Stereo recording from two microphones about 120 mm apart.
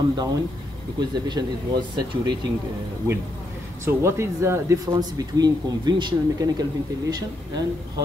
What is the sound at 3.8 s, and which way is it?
Speech, 25° right (ahead or behind).